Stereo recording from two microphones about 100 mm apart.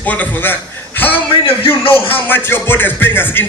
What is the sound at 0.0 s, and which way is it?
A man's voice, 15° left (ahead or behind).